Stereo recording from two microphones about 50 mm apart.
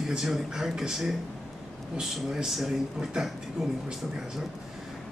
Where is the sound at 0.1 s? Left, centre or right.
Centre.